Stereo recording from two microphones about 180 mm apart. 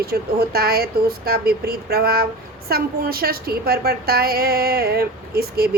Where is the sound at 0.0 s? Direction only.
60° right (ahead or behind).